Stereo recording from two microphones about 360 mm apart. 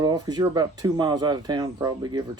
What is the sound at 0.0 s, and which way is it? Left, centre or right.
Speech, centre.